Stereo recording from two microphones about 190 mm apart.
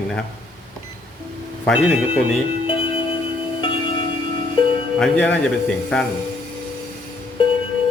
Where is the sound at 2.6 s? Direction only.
25° left (ahead or behind).